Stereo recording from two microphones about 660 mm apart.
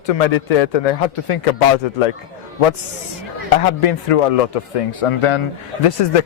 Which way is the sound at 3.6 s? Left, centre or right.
Left.